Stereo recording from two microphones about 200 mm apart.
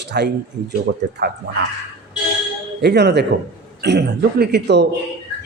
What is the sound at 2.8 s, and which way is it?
Speech, 55° right (ahead or behind).